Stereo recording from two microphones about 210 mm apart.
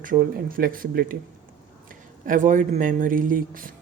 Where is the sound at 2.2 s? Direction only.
40° right (ahead or behind).